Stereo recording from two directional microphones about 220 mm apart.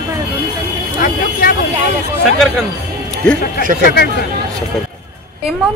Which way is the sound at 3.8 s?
45° left (ahead or behind).